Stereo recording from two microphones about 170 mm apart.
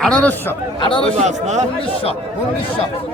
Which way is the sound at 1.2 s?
45° right (ahead or behind).